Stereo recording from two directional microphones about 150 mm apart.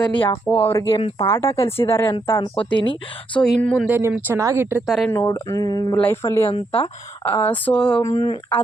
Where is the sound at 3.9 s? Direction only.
15° right (ahead or behind).